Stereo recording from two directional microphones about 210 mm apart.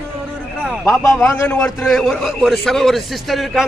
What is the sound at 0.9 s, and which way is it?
A man's voice, 5° left (ahead or behind).